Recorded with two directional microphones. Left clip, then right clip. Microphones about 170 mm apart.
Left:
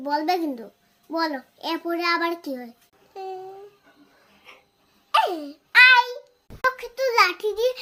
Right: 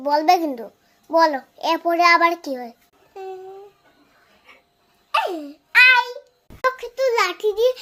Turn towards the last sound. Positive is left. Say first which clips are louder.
# right 3 dB
turn(degrees=15)  # may be behind; listen again after turning